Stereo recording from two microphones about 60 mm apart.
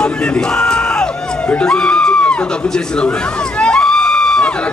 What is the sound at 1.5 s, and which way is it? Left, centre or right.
Speech, centre.